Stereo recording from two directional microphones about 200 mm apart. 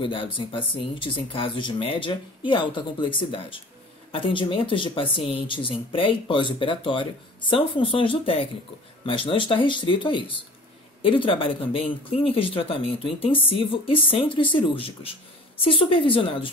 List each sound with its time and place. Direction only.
0.0 s speech: 25° left (ahead or behind)